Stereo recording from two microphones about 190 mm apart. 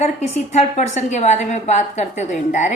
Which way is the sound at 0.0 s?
35° left (ahead or behind).